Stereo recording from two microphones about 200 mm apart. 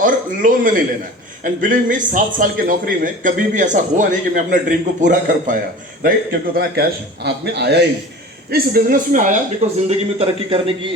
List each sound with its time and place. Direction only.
0.0 s a man's voice: 45° right (ahead or behind)
10.2 s a man's voice: 25° right (ahead or behind)